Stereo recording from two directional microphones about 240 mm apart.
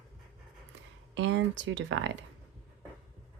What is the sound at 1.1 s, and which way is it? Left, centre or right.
Speech, right.